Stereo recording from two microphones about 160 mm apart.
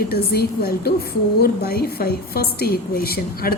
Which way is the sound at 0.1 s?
75° left (ahead or behind).